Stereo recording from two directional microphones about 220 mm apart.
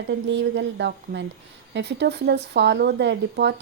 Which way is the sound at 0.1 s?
50° right (ahead or behind).